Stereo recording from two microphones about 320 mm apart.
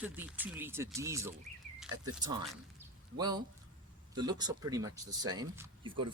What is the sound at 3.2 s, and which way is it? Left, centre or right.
Speech, centre.